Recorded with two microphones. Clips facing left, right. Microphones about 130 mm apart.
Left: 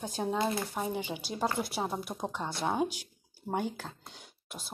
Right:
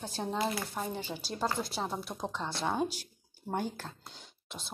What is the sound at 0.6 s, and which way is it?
Speech, 5° left (ahead or behind).